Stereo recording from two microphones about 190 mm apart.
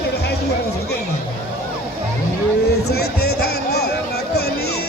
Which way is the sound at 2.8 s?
55° left (ahead or behind).